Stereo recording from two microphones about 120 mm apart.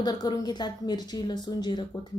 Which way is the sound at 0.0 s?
35° left (ahead or behind).